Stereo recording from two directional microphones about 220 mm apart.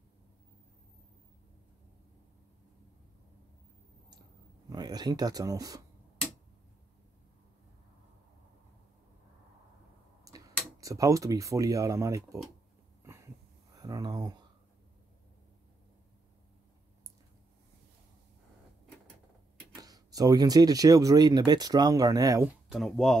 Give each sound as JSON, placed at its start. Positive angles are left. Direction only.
{"t": 4.6, "sound": "speech", "side_deg": -20}
{"t": 10.2, "sound": "speech", "side_deg": -15}
{"t": 13.0, "sound": "a sound", "side_deg": -10}
{"t": 13.7, "sound": "speech", "side_deg": -15}
{"t": 19.8, "sound": "speech", "side_deg": -15}
{"t": 22.7, "sound": "speech", "side_deg": 0}